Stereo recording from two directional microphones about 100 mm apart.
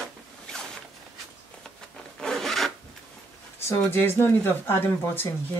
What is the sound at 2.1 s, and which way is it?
Filing, centre (ahead or behind).